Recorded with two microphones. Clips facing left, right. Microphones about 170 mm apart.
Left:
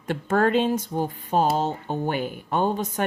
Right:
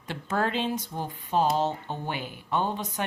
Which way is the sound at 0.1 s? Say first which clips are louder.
Left 7 dB; 50° left (ahead or behind).